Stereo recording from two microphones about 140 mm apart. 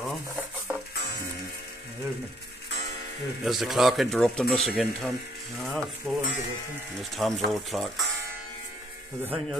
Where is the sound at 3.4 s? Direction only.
Centre (ahead or behind).